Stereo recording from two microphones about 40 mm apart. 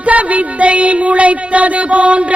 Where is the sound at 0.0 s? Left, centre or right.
Right.